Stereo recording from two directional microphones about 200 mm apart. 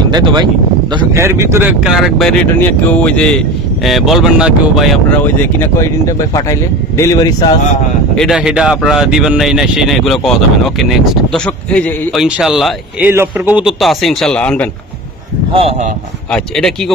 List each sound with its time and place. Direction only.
0.0 s speech: 20° right (ahead or behind); by 4.8 s 5° right (ahead or behind)
5.2 s speech: 10° left (ahead or behind)
8.2 s speech: centre (ahead or behind)
15.5 s speech: 30° right (ahead or behind)
16.3 s speech: centre (ahead or behind)